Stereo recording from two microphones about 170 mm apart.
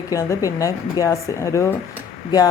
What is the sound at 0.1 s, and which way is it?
Speech, 20° left (ahead or behind).